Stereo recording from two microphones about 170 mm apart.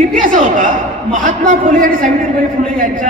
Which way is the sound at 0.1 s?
50° right (ahead or behind).